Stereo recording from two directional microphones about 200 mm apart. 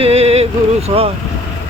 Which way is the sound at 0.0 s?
30° right (ahead or behind).